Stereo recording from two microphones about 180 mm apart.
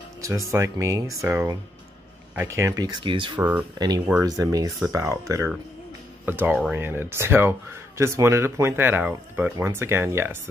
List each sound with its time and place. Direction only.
0.5 s speech: 15° right (ahead or behind)
3.3 s speech: 10° right (ahead or behind)
3.7 s speech: 20° right (ahead or behind)
6.2 s speech: 10° right (ahead or behind)